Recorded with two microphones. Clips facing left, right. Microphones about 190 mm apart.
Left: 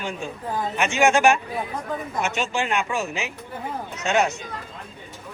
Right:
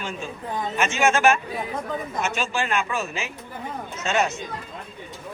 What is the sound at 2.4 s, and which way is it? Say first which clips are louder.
Speech: left 1 dB; 15° left (ahead or behind).